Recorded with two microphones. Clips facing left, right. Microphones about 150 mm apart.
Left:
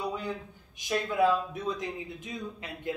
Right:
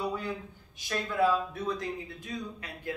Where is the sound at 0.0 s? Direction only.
15° left (ahead or behind).